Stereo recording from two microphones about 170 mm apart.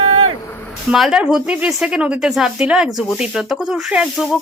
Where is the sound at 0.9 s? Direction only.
Centre (ahead or behind).